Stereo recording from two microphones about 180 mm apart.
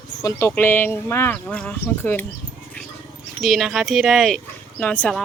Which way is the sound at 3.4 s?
Centre (ahead or behind).